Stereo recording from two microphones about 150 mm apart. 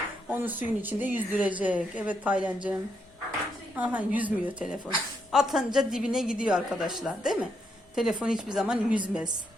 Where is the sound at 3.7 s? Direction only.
10° right (ahead or behind).